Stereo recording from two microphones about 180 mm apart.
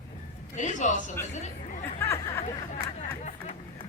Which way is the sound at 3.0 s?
40° left (ahead or behind).